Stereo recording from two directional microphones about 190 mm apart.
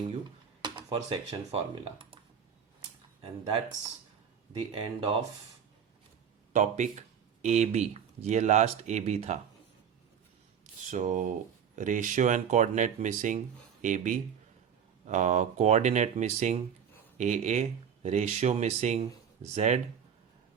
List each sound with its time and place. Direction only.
0.6 s speech: 25° right (ahead or behind)
3.2 s speech: 30° right (ahead or behind)
6.5 s speech: 40° right (ahead or behind)
10.9 s speech: 40° right (ahead or behind)